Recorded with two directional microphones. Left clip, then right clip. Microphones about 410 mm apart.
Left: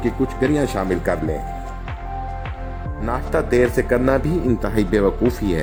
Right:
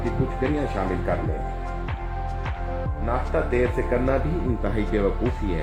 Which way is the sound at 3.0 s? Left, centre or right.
Left.